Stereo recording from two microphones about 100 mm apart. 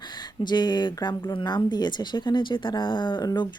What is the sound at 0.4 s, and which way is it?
Speech, 45° left (ahead or behind).